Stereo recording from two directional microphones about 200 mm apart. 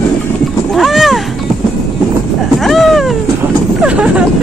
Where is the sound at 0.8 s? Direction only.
Centre (ahead or behind).